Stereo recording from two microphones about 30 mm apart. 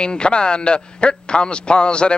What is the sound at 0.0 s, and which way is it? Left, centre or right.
A man's voice, left.